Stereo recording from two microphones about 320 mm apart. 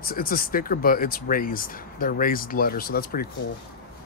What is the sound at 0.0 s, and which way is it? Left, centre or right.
Speech, left.